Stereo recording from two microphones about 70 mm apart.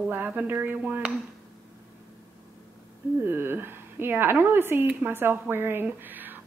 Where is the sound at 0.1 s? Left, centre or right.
Right.